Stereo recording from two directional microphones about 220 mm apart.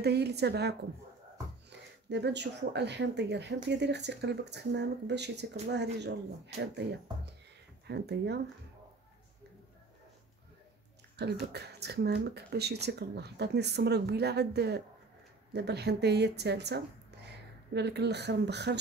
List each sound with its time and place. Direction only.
0.0 s speech: 50° right (ahead or behind)
11.1 s a woman's voice: 50° right (ahead or behind)